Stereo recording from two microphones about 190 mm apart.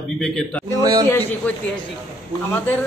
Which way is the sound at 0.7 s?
20° right (ahead or behind).